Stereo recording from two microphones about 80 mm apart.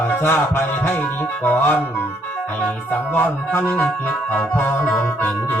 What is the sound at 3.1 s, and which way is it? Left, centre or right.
Music, left.